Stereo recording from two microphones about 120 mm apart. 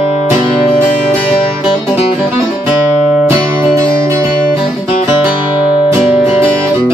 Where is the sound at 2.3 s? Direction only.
15° right (ahead or behind).